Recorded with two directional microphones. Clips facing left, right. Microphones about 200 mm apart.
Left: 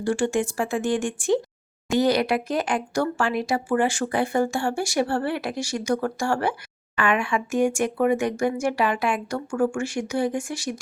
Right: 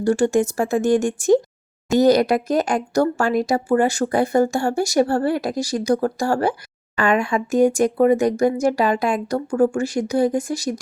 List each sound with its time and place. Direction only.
0.0 s speech: 40° right (ahead or behind)